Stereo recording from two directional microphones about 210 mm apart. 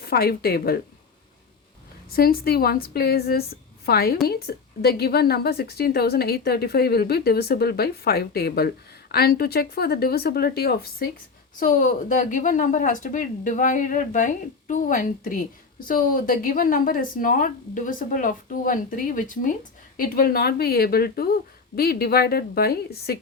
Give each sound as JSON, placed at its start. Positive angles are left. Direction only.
{"t": 0.0, "sound": "a woman's voice", "side_deg": 45}
{"t": 2.0, "sound": "a woman's voice", "side_deg": 45}